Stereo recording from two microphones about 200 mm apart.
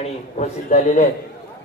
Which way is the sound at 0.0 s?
35° left (ahead or behind).